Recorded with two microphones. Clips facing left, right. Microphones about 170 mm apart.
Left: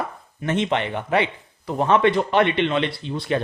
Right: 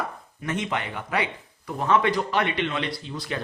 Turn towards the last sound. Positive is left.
turn(degrees=25)  # may be behind; listen again after turning